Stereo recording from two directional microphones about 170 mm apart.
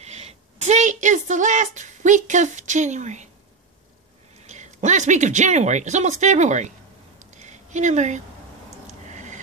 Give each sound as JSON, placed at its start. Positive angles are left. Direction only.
{"t": 0.0, "sound": "speech", "side_deg": -40}
{"t": 4.5, "sound": "speech", "side_deg": -45}
{"t": 7.3, "sound": "a sound", "side_deg": -45}